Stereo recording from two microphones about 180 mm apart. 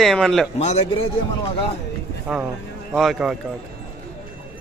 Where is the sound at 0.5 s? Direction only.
35° left (ahead or behind).